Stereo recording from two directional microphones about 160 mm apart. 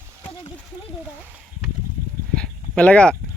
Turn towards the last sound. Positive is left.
turn(degrees=5)  # may be behind; listen again after turning